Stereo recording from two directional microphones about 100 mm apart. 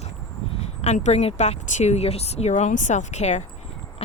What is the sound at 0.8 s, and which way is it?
Speech, 90° left.